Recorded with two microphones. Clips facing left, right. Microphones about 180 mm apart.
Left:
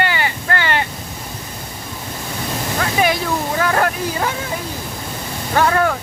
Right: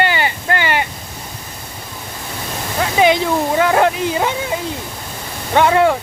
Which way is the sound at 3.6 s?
20° right (ahead or behind).